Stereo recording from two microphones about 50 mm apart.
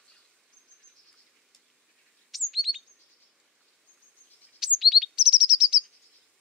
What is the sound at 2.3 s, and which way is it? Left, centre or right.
Chirp, centre.